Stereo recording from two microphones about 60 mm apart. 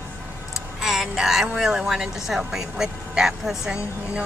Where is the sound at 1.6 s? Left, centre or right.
Centre.